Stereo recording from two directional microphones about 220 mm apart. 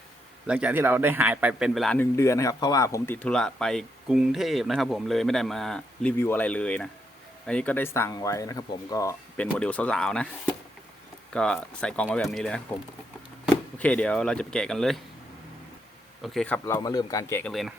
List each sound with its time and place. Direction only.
0.4 s speech: 5° right (ahead or behind)
13.7 s speech: 5° left (ahead or behind)
16.2 s speech: centre (ahead or behind)
17.5 s speech: centre (ahead or behind)